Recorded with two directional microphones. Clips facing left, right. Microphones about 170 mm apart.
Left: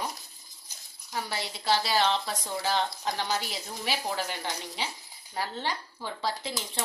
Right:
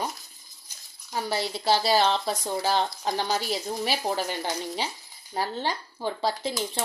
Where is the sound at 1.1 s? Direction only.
35° right (ahead or behind).